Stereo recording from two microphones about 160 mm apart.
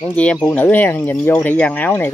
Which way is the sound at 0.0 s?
10° left (ahead or behind).